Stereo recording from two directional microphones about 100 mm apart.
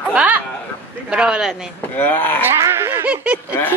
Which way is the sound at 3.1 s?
15° right (ahead or behind).